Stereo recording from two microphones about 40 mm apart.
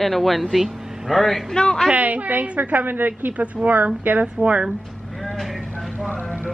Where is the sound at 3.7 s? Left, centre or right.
Right.